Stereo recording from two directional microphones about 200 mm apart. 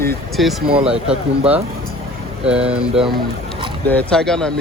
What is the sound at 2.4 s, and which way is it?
Speech, 5° right (ahead or behind).